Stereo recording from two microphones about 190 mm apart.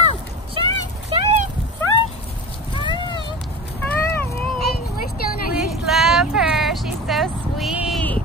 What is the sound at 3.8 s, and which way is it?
Vehicle, 15° left (ahead or behind).